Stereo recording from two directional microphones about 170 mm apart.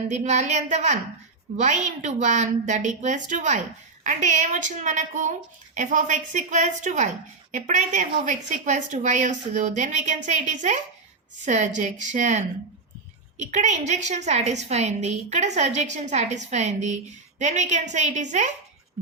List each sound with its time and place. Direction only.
0.1 s a woman's voice: 45° right (ahead or behind)